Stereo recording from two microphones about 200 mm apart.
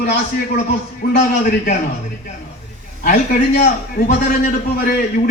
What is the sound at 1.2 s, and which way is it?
Speech, 40° left (ahead or behind).